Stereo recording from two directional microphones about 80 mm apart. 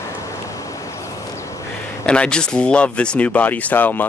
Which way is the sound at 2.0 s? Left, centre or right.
Centre.